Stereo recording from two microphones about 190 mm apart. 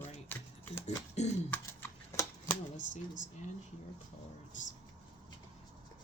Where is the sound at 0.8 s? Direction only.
35° left (ahead or behind).